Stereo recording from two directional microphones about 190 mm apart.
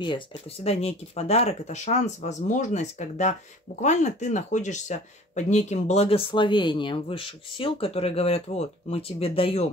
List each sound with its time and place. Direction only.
0.0 s speech: 30° left (ahead or behind)